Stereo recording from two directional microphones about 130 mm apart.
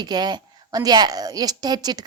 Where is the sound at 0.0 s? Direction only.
30° right (ahead or behind).